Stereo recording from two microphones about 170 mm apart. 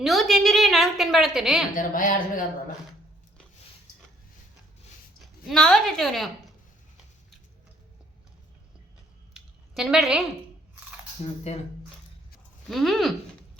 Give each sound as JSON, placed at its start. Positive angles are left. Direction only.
{"t": 0.0, "sound": "a woman's voice", "side_deg": 0}
{"t": 1.7, "sound": "speech", "side_deg": 50}
{"t": 5.2, "sound": "a woman's voice", "side_deg": 0}
{"t": 9.3, "sound": "a sound", "side_deg": -5}
{"t": 12.7, "sound": "a woman's voice", "side_deg": 0}